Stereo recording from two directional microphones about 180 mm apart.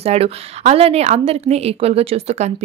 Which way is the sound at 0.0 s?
35° right (ahead or behind).